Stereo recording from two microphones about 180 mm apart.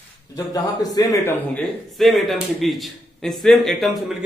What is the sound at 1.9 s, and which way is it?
Speech, centre (ahead or behind).